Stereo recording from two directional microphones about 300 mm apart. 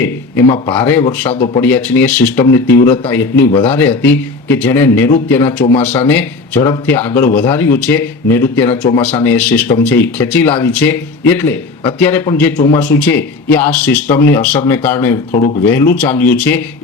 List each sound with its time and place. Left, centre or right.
0.0 s speech: centre
1.3 s speech: centre
1.6 s speech: centre
15.3 s speech: left
15.6 s speech: centre